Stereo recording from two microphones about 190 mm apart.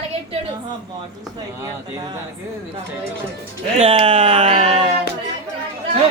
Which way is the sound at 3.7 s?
35° right (ahead or behind).